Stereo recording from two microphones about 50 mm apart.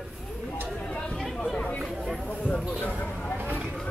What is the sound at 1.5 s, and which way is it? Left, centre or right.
Chatter, left.